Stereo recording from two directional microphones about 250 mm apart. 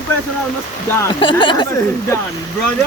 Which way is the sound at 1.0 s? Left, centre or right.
Centre.